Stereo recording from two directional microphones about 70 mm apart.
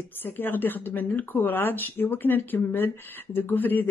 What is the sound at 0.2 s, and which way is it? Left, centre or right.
Speech, left.